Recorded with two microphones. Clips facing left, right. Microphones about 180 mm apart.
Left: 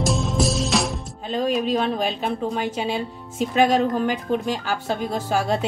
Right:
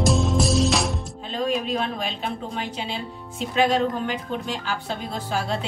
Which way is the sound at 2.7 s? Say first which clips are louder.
Left 6 dB; 45° left (ahead or behind).